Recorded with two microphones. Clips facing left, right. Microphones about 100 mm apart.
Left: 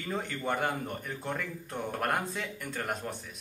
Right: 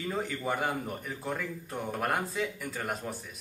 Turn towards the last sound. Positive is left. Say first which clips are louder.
# even
turn(degrees=0)  # may be behind; listen again after turning